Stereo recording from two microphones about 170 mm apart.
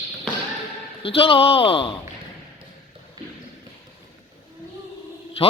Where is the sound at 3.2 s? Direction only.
25° right (ahead or behind).